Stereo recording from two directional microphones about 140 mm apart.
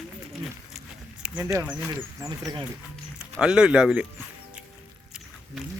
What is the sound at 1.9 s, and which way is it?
Speech, 25° right (ahead or behind).